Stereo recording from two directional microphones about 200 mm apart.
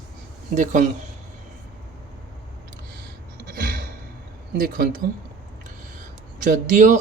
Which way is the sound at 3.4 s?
45° right (ahead or behind).